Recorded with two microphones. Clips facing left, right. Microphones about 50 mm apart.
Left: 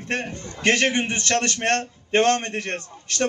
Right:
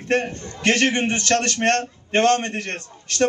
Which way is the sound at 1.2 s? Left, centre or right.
Left.